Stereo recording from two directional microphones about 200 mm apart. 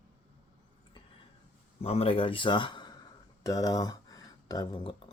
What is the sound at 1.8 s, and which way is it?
Speech, 30° left (ahead or behind).